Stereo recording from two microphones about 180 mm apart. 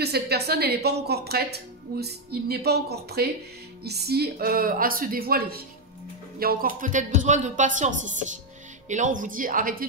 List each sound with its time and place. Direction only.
0.0 s a woman's voice: 65° right (ahead or behind)